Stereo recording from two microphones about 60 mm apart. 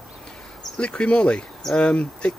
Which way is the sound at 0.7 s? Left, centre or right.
Centre.